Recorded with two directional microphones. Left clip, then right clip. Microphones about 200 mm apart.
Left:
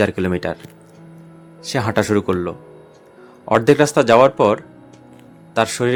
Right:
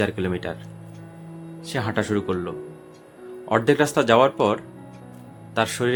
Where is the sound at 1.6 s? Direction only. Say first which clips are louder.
Left 7 dB; 20° left (ahead or behind).